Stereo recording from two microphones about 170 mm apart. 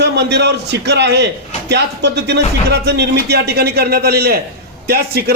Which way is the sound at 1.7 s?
80° right.